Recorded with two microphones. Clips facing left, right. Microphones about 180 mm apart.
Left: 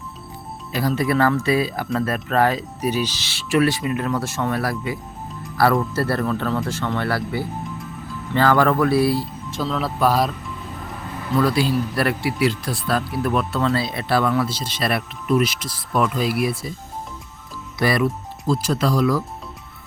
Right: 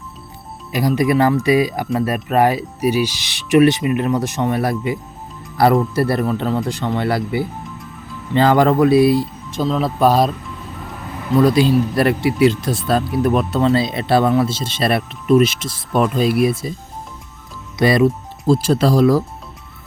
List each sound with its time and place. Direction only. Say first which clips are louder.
0.7 s speech: right 4 dB; 15° right (ahead or behind)
11.3 s speech: right 6 dB; 20° right (ahead or behind)
17.7 s speech: right 6 dB; 25° right (ahead or behind)